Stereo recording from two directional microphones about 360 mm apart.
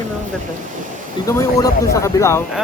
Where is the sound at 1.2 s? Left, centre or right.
Centre.